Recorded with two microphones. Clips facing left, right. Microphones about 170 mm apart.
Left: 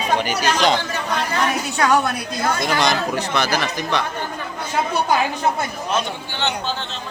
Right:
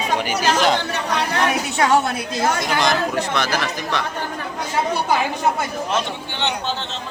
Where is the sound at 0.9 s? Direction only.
70° right (ahead or behind).